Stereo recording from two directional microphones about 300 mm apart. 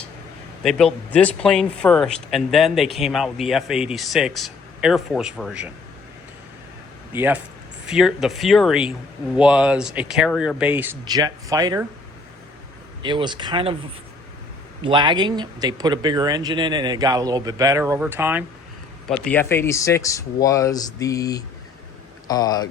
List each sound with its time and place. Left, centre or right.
0.6 s a man's voice: centre
7.1 s a man's voice: centre
13.0 s speech: centre
14.8 s speech: centre
19.0 s speech: centre